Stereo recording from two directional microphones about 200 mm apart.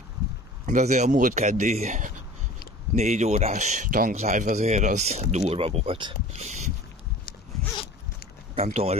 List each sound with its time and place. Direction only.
0.7 s a man's voice: 35° right (ahead or behind)
8.5 s a man's voice: 30° right (ahead or behind)